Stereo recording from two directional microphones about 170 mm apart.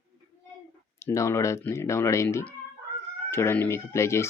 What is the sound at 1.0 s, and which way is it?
Speech, 15° left (ahead or behind).